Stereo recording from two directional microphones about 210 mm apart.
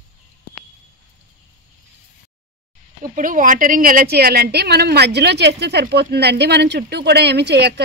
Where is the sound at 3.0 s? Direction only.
40° right (ahead or behind).